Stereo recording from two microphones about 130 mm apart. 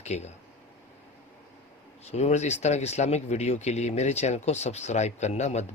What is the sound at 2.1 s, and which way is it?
Speech, 60° left (ahead or behind).